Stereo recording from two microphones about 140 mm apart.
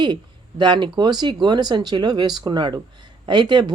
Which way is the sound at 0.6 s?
30° right (ahead or behind).